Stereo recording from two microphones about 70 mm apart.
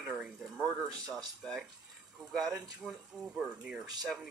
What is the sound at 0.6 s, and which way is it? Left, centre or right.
Speech, centre.